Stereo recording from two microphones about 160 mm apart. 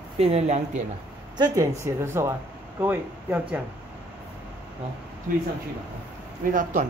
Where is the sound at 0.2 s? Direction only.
40° right (ahead or behind).